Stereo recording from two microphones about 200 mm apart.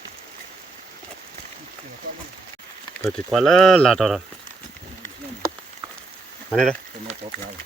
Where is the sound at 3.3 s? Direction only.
Centre (ahead or behind).